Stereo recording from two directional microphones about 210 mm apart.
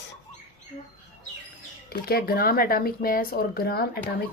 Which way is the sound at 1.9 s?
45° left (ahead or behind).